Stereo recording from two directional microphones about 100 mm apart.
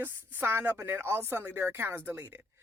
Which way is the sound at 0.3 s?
20° right (ahead or behind).